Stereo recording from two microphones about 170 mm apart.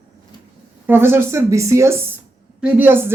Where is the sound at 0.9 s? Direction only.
15° right (ahead or behind).